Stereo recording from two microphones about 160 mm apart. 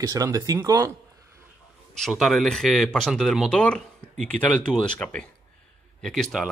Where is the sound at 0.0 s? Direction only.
20° right (ahead or behind).